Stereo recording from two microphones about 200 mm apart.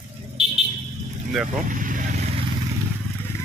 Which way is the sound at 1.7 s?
40° right (ahead or behind).